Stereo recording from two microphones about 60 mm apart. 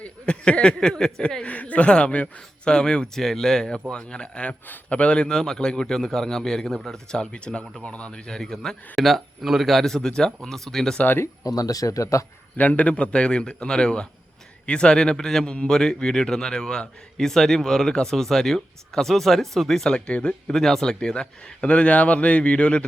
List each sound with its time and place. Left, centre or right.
0.0 s speech: centre
11.4 s speech: left
12.5 s speech: left